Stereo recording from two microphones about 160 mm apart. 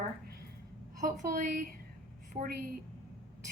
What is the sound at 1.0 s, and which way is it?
Speech, 50° right (ahead or behind).